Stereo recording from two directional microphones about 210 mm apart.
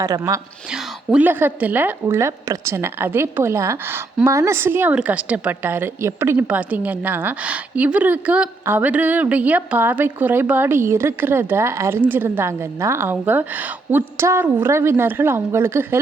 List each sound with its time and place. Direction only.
0.0 s a woman's voice: 15° right (ahead or behind)
0.7 s a woman's voice: 5° right (ahead or behind)